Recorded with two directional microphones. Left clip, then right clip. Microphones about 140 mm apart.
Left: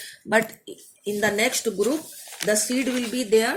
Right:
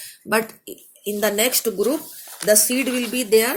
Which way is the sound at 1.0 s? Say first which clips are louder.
Right 2 dB; 30° right (ahead or behind).